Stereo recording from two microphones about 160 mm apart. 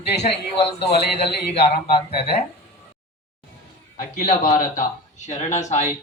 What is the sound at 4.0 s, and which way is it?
A man's voice, 55° left (ahead or behind).